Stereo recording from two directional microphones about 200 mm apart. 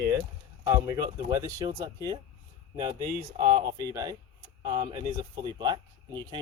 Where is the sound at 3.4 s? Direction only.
25° right (ahead or behind).